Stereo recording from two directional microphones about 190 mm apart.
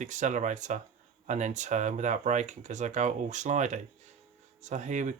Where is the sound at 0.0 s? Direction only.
40° right (ahead or behind).